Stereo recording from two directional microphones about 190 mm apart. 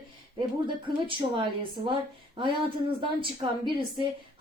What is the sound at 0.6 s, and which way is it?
A woman's voice, 25° right (ahead or behind).